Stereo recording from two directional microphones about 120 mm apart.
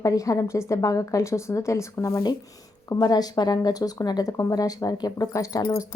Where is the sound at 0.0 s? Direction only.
30° left (ahead or behind).